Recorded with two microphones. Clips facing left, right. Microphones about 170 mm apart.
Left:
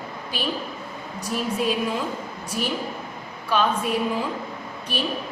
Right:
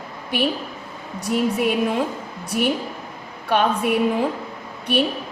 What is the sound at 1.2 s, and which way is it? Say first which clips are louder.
Speech: right 5 dB; 65° right (ahead or behind).